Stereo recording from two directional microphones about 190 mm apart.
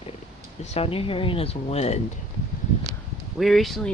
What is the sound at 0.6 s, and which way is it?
Speech, 35° left (ahead or behind).